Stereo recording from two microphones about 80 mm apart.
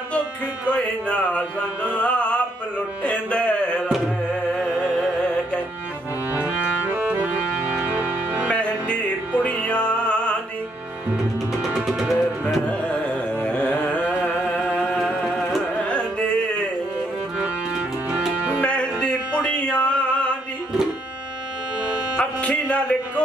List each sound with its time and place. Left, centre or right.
0.7 s speech: centre
2.0 s music: centre
4.6 s music: centre
6.3 s music: right
8.5 s music: centre
11.6 s music: centre
12.6 s carnatic music: centre
14.4 s music: centre
15.4 s carnatic music: centre
18.6 s music: centre
22.2 s a sound: centre